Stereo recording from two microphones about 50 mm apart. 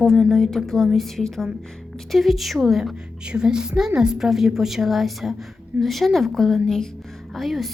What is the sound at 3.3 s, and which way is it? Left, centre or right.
A woman's voice, centre.